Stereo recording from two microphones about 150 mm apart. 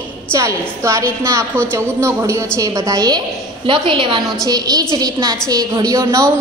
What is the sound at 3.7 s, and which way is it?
Female singing, 35° right (ahead or behind).